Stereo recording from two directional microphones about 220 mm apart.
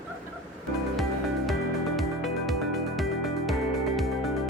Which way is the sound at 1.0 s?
Centre (ahead or behind).